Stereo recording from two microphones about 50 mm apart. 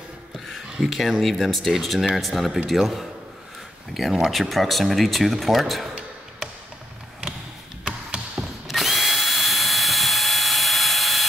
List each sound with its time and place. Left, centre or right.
0.8 s speech: centre
7.8 s a sound: centre
8.7 s drill: centre